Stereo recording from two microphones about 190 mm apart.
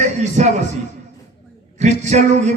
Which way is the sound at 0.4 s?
40° right (ahead or behind).